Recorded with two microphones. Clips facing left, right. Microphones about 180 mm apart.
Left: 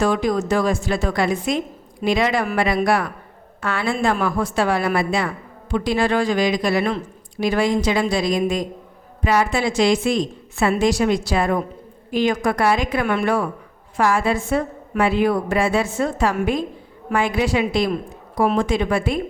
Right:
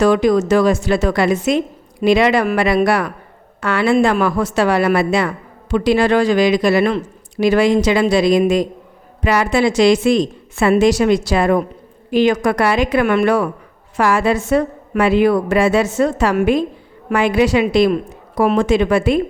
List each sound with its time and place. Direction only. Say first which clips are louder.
0.0 s a woman's voice: right 6 dB; 75° right (ahead or behind)